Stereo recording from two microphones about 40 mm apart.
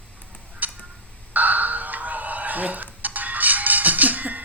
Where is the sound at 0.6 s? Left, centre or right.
Right.